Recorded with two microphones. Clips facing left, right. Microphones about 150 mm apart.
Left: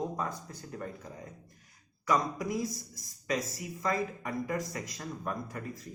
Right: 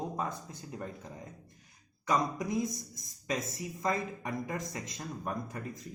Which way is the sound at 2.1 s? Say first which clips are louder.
Left 1 dB; 20° right (ahead or behind).